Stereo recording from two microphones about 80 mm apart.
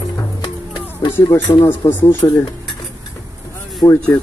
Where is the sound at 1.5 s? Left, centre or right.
Left.